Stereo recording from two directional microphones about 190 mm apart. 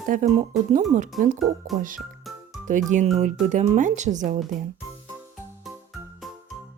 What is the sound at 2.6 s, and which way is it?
Speech, 40° right (ahead or behind).